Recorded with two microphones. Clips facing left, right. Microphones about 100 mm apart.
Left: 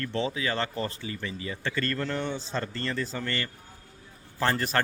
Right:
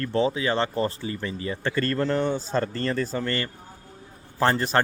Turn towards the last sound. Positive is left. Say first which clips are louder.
# right 5 dB
turn(degrees=-30)  # may be behind; listen again after turning